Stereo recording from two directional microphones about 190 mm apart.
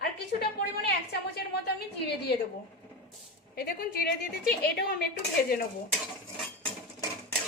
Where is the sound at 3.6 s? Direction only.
55° left (ahead or behind).